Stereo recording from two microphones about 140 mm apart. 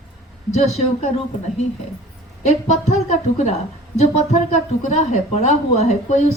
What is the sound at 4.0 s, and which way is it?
A woman's voice, 55° left (ahead or behind).